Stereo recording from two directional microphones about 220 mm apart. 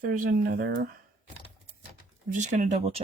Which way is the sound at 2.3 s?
35° right (ahead or behind).